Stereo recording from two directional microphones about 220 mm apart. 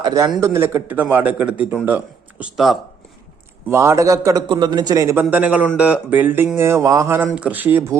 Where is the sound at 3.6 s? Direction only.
10° right (ahead or behind).